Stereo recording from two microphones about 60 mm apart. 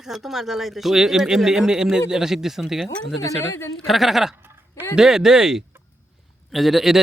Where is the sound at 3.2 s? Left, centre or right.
Left.